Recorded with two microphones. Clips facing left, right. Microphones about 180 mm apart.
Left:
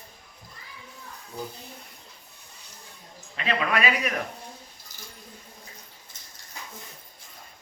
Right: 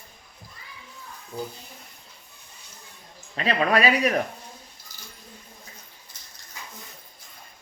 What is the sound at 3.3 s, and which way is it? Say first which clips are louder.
Speech: right 4 dB; 35° right (ahead or behind).